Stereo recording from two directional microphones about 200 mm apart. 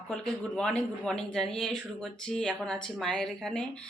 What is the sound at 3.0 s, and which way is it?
Speech, 5° left (ahead or behind).